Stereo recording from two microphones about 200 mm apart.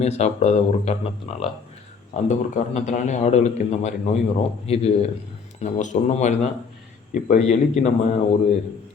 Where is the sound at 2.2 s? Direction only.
35° left (ahead or behind).